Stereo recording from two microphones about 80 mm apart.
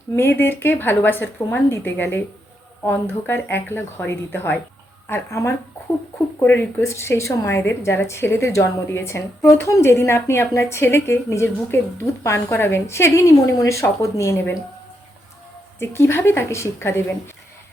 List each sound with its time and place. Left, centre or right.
0.2 s a woman's voice: left
15.8 s a woman's voice: left